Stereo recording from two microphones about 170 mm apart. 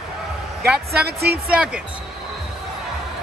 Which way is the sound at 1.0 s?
70° right (ahead or behind).